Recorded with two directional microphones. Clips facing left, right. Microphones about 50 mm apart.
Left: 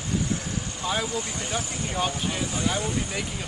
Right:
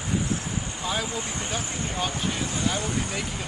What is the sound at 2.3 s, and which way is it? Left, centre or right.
Speech, centre.